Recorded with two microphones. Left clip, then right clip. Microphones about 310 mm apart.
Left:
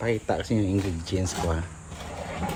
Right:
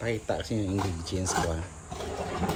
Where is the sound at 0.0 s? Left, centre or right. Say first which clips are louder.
Left 4 dB; centre.